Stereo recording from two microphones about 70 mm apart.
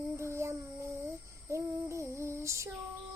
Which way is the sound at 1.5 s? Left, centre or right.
Right.